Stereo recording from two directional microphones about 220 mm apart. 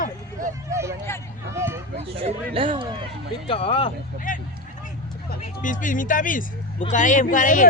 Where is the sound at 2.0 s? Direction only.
25° right (ahead or behind).